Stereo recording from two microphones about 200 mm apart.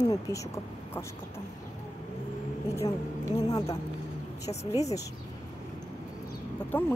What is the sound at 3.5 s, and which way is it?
Speech, 20° left (ahead or behind).